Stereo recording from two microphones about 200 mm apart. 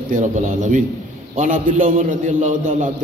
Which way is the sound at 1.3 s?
40° right (ahead or behind).